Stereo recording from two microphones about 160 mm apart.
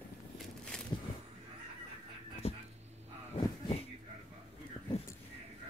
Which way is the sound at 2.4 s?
40° left (ahead or behind).